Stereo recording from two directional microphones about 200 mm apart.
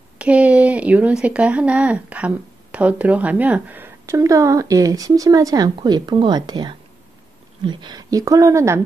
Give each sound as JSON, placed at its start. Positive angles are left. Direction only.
{"t": 0.2, "sound": "speech", "side_deg": -5}